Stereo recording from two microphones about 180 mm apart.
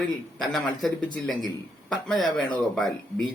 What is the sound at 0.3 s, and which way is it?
Speech, centre (ahead or behind).